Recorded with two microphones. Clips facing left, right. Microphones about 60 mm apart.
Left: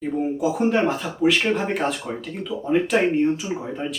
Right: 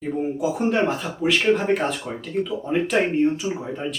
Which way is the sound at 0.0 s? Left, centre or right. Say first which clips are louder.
Left 1 dB; centre.